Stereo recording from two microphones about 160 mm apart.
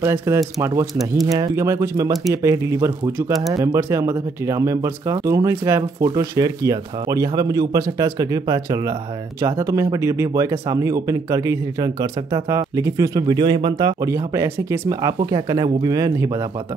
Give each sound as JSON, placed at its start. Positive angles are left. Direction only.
{"t": 0.0, "sound": "speech", "side_deg": -15}